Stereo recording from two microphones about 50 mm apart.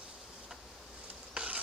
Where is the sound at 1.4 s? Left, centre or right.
Right.